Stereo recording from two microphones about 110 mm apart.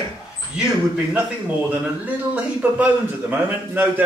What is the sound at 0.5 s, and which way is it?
A man's voice, 15° right (ahead or behind).